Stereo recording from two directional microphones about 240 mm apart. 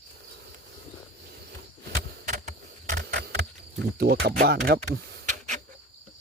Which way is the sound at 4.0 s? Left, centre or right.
Right.